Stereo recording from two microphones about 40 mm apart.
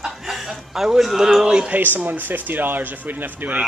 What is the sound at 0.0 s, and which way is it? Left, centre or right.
Chuckle, centre.